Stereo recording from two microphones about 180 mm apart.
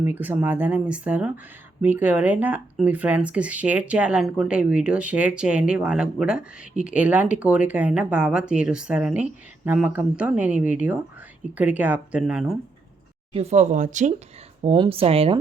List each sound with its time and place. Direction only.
0.0 s speech: 10° right (ahead or behind)
13.3 s speech: 35° right (ahead or behind)
14.6 s speech: 30° right (ahead or behind)